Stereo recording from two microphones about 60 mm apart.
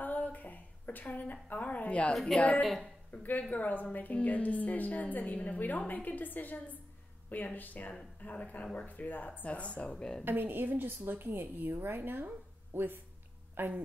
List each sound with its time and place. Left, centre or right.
0.0 s a sound: left
2.3 s a woman's voice: left
2.6 s a woman's voice: centre
3.1 s a woman's voice: left
10.2 s a woman's voice: right